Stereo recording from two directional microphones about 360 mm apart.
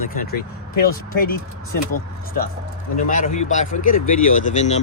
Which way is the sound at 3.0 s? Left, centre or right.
Left.